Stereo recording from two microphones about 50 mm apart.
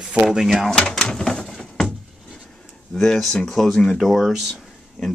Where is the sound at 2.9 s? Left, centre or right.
Centre.